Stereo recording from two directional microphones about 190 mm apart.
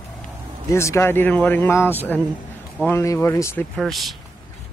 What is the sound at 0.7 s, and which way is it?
Speech, 15° left (ahead or behind).